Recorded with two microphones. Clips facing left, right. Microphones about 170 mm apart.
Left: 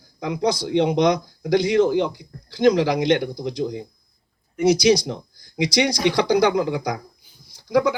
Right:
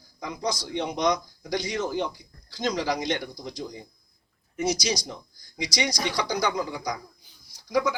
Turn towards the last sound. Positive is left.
turn(degrees=55)  # may be behind; listen again after turning